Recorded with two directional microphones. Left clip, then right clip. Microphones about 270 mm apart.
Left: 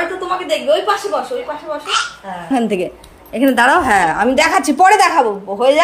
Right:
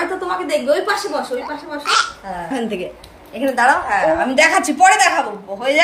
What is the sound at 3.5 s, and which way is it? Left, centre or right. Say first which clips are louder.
Speech: left 2 dB; left.